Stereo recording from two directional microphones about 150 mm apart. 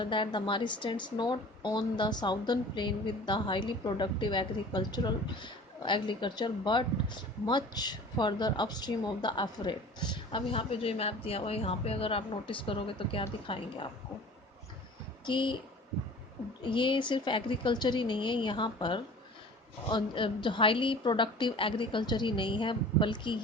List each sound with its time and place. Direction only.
0.0 s speech: 30° left (ahead or behind)
15.3 s speech: 35° left (ahead or behind)
16.6 s speech: 35° left (ahead or behind)